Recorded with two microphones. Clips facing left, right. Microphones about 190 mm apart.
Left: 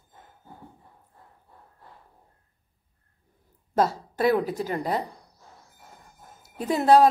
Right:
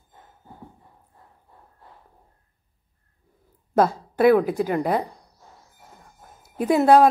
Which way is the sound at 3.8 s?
50° right (ahead or behind).